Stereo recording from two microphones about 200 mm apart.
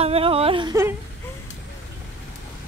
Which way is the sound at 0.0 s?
30° right (ahead or behind).